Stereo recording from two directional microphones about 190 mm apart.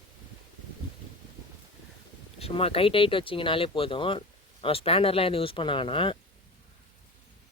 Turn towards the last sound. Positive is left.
turn(degrees=25)  # may be behind; listen again after turning